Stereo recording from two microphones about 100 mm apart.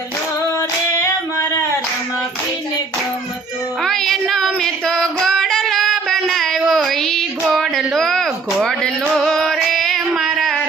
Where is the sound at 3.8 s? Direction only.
5° left (ahead or behind).